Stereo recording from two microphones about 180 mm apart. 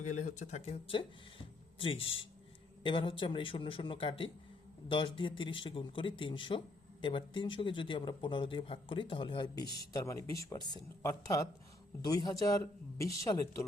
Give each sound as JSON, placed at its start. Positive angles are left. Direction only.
{"t": 0.0, "sound": "speech", "side_deg": 45}